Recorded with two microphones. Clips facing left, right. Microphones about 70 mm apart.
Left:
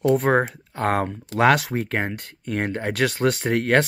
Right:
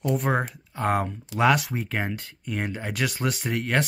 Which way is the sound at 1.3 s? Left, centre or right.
Left.